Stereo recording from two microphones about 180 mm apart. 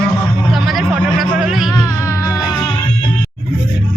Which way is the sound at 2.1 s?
20° left (ahead or behind).